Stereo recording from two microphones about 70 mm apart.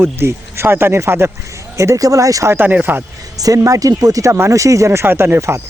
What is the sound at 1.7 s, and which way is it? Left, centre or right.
Speech, right.